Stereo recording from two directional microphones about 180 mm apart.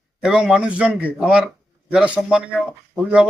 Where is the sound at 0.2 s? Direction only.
Centre (ahead or behind).